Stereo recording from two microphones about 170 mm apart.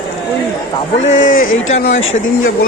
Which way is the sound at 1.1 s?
55° left (ahead or behind).